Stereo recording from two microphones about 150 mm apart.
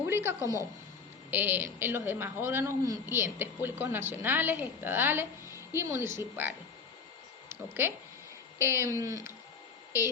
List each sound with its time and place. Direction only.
0.0 s a woman's voice: 15° right (ahead or behind)
7.5 s a woman's voice: 15° right (ahead or behind)